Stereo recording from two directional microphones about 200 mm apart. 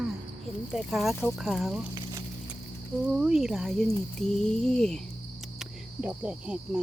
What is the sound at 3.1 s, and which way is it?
Speech, 5° right (ahead or behind).